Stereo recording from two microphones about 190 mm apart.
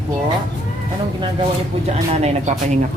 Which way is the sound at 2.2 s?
35° right (ahead or behind).